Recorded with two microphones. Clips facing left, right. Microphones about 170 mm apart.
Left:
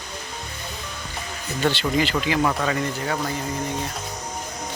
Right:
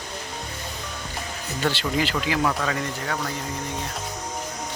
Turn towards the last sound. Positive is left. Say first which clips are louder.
# left 3 dB
turn(degrees=5)  # may be behind; listen again after turning